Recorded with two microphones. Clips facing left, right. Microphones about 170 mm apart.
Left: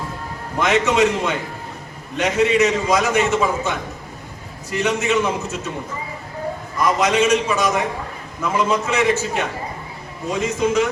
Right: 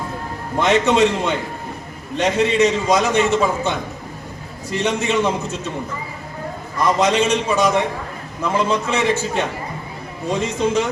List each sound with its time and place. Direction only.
0.6 s a man's voice: 30° right (ahead or behind)
6.8 s a man's voice: 30° right (ahead or behind)